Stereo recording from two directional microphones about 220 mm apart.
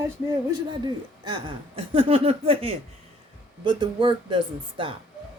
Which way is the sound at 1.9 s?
25° right (ahead or behind).